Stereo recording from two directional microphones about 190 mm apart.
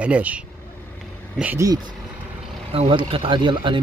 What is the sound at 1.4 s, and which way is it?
Speech, 15° right (ahead or behind).